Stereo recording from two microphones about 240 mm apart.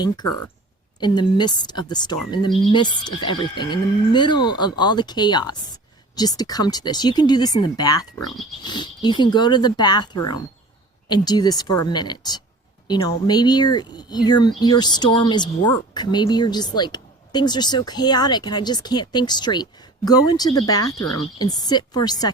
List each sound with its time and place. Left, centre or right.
0.0 s a woman's voice: centre